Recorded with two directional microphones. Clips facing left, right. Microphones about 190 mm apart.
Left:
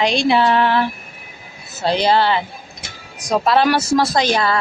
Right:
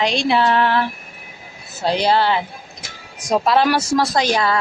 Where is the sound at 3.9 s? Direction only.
Centre (ahead or behind).